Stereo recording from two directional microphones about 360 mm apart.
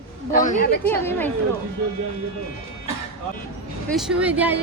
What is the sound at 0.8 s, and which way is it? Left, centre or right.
Speech, centre.